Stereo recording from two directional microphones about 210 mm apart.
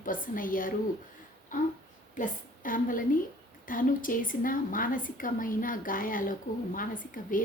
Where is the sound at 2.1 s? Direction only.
40° left (ahead or behind).